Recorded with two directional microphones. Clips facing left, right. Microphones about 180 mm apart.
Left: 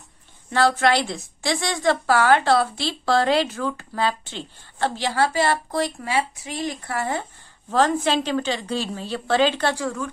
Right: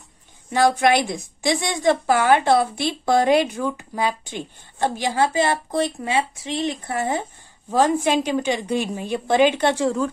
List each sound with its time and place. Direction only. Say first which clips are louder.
0.5 s a woman's voice: right 2 dB; 15° right (ahead or behind)